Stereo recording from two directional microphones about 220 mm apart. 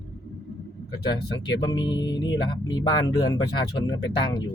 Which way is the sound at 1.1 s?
20° left (ahead or behind).